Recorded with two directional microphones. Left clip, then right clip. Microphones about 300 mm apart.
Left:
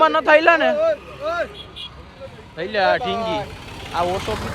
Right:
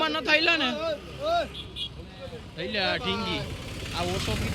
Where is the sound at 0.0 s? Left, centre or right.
Centre.